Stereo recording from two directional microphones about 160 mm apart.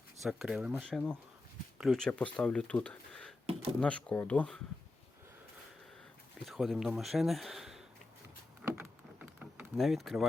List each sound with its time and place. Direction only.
0.2 s speech: 5° right (ahead or behind)
0.9 s speech: 5° left (ahead or behind)
6.4 s speech: centre (ahead or behind)
8.6 s a sound: 10° right (ahead or behind)
9.7 s speech: centre (ahead or behind)